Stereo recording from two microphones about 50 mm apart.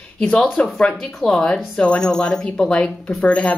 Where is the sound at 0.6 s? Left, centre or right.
Left.